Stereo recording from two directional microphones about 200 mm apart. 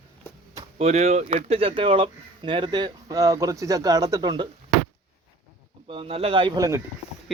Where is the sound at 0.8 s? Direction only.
35° right (ahead or behind).